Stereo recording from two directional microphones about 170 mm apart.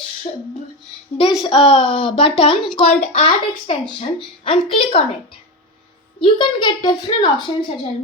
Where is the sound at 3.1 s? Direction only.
35° left (ahead or behind).